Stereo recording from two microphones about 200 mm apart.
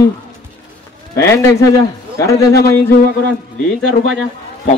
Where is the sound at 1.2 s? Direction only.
15° left (ahead or behind).